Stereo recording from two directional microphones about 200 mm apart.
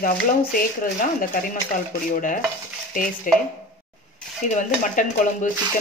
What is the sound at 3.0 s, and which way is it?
Dishes, 45° left (ahead or behind).